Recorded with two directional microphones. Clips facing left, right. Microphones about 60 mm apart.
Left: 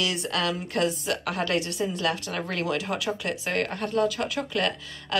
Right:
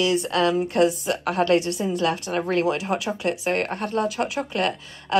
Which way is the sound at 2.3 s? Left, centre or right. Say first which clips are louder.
Right 6 dB; right.